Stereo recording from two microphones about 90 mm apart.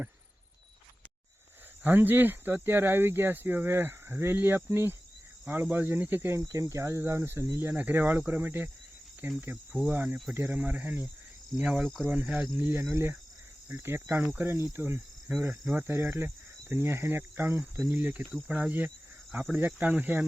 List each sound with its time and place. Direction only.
1.8 s speech: 20° right (ahead or behind)
6.4 s speech: 40° right (ahead or behind); by 11.0 s 20° right (ahead or behind)
11.5 s cricket: 5° right (ahead or behind)
12.0 s speech: 20° right (ahead or behind)
12.8 s speech: 30° right (ahead or behind)
14.7 s cricket: 25° right (ahead or behind)
15.7 s speech: 25° right (ahead or behind)
16.1 s cricket: 25° right (ahead or behind)
18.4 s speech: 15° right (ahead or behind)